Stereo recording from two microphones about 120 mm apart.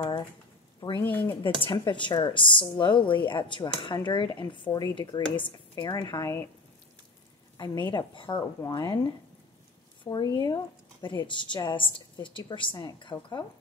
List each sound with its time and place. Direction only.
0.0 s speech: 45° left (ahead or behind)
1.0 s speech: 15° left (ahead or behind)
1.6 s speech: 40° left (ahead or behind)
7.5 s speech: 35° left (ahead or behind)
10.0 s speech: 35° left (ahead or behind)